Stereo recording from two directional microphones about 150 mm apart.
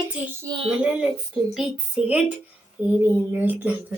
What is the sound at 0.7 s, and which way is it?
Speech, 10° right (ahead or behind).